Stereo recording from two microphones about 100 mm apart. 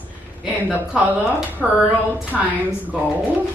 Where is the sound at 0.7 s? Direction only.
15° right (ahead or behind).